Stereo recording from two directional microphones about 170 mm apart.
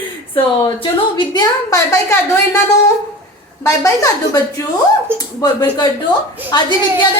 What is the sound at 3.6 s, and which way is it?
Speech, 20° left (ahead or behind).